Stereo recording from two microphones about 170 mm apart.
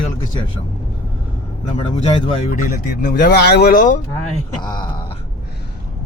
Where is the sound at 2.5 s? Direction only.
50° left (ahead or behind).